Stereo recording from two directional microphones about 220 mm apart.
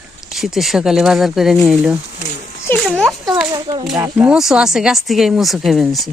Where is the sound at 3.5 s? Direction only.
20° right (ahead or behind); by 6.0 s centre (ahead or behind).